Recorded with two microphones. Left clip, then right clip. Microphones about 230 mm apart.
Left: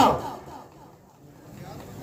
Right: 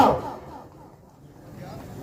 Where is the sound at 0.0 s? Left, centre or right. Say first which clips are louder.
Right 1 dB; left.